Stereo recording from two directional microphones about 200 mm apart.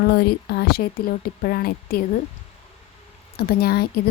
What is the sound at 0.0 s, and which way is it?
Speech, 50° left (ahead or behind).